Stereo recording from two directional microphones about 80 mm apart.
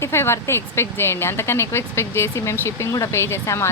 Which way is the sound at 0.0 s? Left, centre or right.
Left.